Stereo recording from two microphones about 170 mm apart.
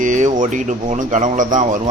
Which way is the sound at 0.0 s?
45° right (ahead or behind).